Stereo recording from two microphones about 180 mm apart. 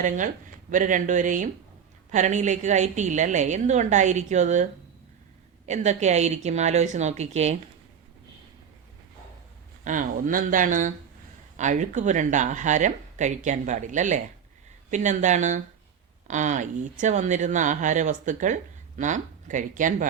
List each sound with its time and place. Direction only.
0.7 s a woman's voice: 45° right (ahead or behind)
9.8 s a woman's voice: 45° right (ahead or behind)